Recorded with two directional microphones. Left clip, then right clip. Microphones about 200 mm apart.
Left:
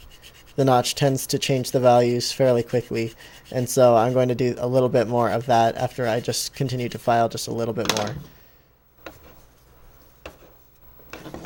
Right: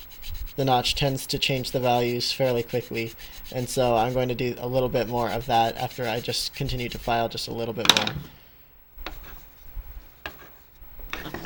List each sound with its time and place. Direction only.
0.5 s speech: 35° left (ahead or behind)